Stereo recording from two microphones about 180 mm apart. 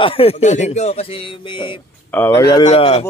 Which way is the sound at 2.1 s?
15° left (ahead or behind).